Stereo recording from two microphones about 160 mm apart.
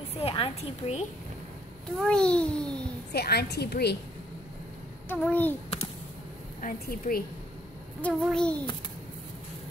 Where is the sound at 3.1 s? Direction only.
85° left.